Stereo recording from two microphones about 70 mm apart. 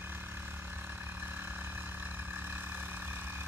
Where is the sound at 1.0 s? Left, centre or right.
Right.